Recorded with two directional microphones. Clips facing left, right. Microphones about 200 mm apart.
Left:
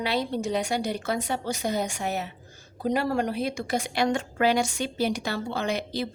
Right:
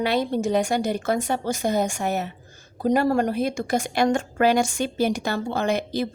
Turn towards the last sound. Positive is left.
turn(degrees=-50)  # may be behind; listen again after turning